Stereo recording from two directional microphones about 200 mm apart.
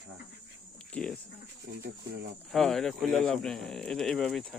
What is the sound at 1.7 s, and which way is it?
Speech, 40° right (ahead or behind).